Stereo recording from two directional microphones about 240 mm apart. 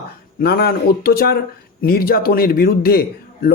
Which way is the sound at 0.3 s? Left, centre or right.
Left.